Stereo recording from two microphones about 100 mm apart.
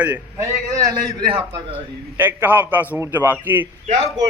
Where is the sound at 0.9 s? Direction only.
40° right (ahead or behind).